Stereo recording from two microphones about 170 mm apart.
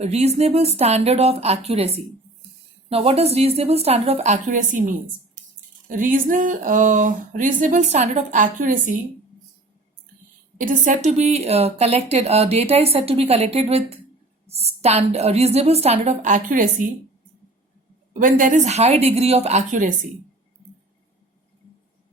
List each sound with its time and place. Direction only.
0.0 s speech: 40° right (ahead or behind)
10.6 s speech: 50° right (ahead or behind)
18.1 s speech: 50° right (ahead or behind)